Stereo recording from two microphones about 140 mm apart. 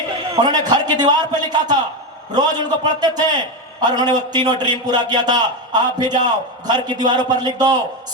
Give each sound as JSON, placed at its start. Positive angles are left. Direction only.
{"t": 0.3, "sound": "a man's voice", "side_deg": -30}